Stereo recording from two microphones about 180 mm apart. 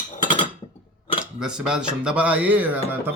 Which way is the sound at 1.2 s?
5° right (ahead or behind).